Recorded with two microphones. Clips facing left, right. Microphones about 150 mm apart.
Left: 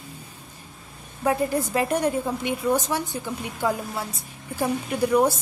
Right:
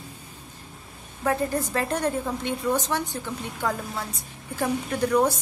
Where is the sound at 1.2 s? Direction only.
15° left (ahead or behind).